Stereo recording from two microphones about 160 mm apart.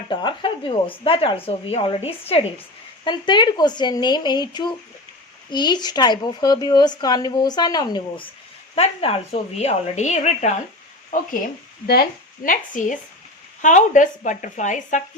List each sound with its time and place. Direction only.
0.1 s a woman's voice: 30° left (ahead or behind); by 10.5 s 45° left (ahead or behind)
11.1 s a woman's voice: 60° left (ahead or behind)